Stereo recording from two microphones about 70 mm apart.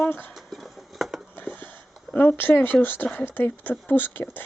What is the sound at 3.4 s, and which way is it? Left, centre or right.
Speech, left.